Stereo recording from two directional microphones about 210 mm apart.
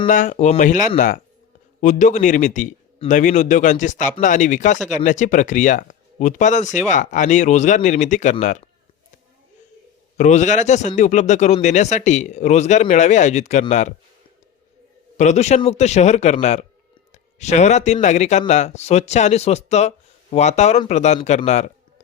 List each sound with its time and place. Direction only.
0.1 s a man's voice: 35° left (ahead or behind)
10.2 s a man's voice: 35° left (ahead or behind)
15.2 s a man's voice: 35° left (ahead or behind)